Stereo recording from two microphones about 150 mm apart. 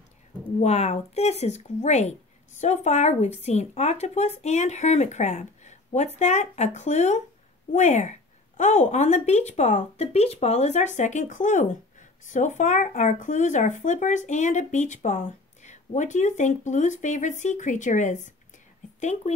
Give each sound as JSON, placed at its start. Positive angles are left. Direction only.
{"t": 0.6, "sound": "speech", "side_deg": 45}